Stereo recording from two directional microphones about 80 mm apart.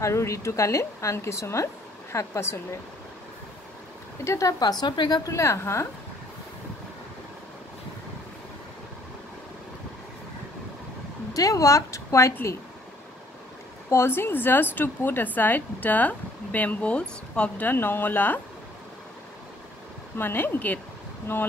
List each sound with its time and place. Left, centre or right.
0.0 s speech: left
4.2 s speech: left
4.6 s a woman's voice: left
5.2 s speech: left
11.3 s speech: left
13.8 s a woman's voice: left
20.2 s a woman's voice: left